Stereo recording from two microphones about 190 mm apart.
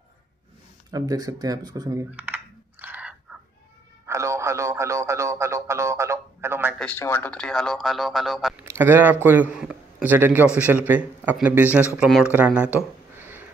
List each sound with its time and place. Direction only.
0.9 s computer keyboard: 20° right (ahead or behind)
4.0 s a sound: 15° right (ahead or behind)
6.8 s speech: 10° left (ahead or behind); by 13.5 s 10° right (ahead or behind)